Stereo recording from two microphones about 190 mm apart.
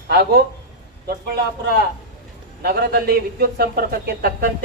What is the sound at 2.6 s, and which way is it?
A man's voice, 55° right (ahead or behind).